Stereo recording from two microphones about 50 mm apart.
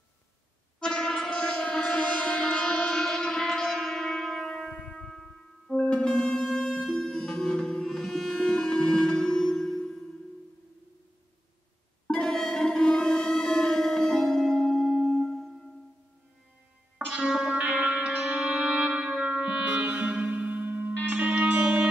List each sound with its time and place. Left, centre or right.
0.7 s music: centre
5.1 s music: centre
5.8 s music: centre
12.1 s music: centre
17.1 s music: centre